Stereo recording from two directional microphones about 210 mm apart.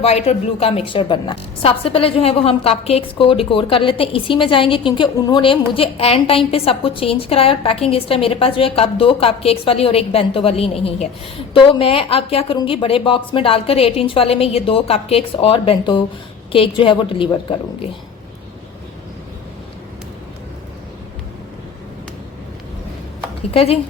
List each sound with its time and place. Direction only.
0.0 s a woman's voice: 30° left (ahead or behind)